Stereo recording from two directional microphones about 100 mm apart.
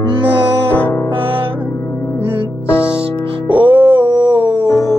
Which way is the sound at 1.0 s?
60° right (ahead or behind).